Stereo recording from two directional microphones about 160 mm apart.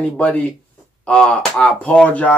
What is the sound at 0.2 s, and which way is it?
Speech, 10° left (ahead or behind).